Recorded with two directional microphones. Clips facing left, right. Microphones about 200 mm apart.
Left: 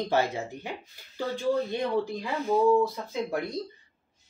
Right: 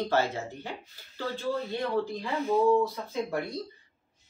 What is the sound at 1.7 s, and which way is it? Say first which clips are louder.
Speech: left 2 dB; 15° left (ahead or behind).